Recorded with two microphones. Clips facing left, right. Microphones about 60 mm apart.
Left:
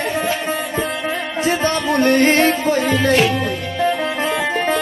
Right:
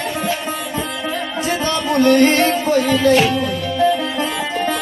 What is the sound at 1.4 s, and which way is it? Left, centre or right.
Music, left.